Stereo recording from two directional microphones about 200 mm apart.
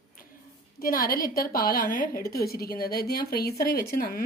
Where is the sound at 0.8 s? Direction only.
45° left (ahead or behind).